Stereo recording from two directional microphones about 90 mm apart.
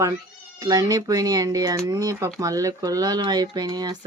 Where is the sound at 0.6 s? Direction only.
40° right (ahead or behind).